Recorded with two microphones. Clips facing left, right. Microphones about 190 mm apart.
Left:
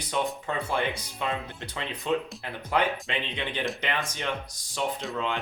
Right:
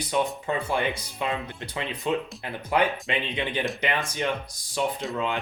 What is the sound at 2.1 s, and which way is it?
Speech, 15° right (ahead or behind).